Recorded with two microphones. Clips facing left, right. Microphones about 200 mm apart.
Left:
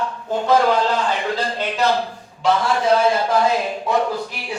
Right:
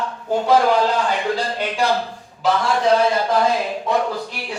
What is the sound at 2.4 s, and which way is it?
Speech, centre (ahead or behind).